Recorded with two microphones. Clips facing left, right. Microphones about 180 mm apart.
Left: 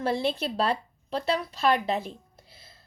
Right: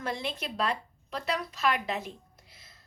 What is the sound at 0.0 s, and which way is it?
A woman's voice, 30° left (ahead or behind).